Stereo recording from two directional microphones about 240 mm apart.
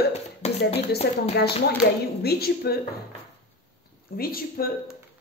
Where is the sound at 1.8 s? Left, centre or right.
Left.